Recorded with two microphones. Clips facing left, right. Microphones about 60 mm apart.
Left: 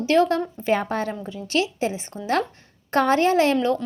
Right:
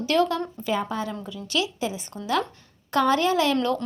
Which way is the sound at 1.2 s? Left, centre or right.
Left.